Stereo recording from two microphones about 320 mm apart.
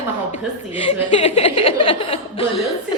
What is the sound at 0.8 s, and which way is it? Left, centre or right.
A woman's voice, centre.